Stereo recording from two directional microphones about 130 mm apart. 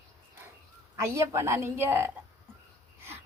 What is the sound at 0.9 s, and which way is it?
A woman's voice, 20° right (ahead or behind).